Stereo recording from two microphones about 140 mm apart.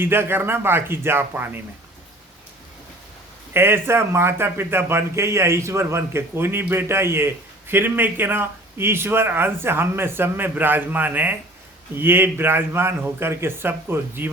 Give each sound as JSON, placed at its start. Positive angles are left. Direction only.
{"t": 0.0, "sound": "speech", "side_deg": -15}
{"t": 3.5, "sound": "speech", "side_deg": -15}